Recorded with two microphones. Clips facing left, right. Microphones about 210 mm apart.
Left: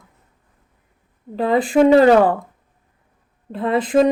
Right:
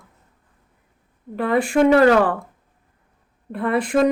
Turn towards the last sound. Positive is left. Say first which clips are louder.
# left 2 dB
turn(degrees=20)  # may be behind; listen again after turning